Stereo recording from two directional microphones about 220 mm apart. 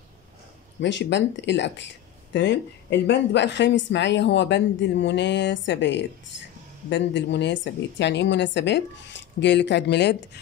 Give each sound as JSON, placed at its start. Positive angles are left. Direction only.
{"t": 0.7, "sound": "speech", "side_deg": 55}